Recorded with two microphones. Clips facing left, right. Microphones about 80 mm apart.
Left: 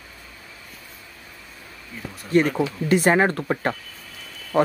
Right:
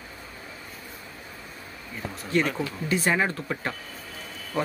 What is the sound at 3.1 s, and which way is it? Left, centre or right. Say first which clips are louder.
Speech: left 6 dB; left.